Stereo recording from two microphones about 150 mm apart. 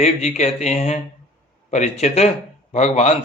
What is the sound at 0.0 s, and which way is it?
A man's voice, 45° left (ahead or behind).